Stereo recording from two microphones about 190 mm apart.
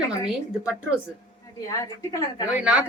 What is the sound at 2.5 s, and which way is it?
Speech, 5° right (ahead or behind).